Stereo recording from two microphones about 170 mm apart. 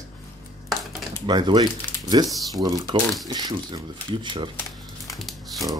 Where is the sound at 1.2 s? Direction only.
25° right (ahead or behind).